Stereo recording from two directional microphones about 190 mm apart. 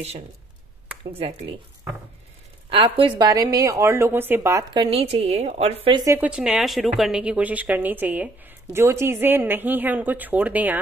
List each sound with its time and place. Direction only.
1.1 s a woman's voice: 30° right (ahead or behind)
2.7 s a woman's voice: 25° right (ahead or behind)
4.8 s a woman's voice: 30° right (ahead or behind)
6.0 s a woman's voice: 10° right (ahead or behind)